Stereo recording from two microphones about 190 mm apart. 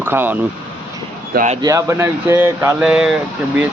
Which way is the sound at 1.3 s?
45° right (ahead or behind).